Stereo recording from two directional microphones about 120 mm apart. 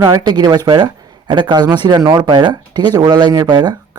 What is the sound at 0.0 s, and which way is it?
Speech, 35° right (ahead or behind).